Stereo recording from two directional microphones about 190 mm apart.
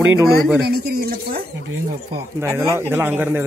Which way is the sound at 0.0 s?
10° right (ahead or behind).